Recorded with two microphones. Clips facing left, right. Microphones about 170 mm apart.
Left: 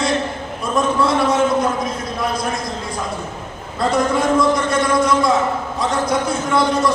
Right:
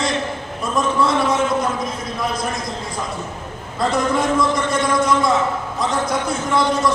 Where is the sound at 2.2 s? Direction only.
Centre (ahead or behind).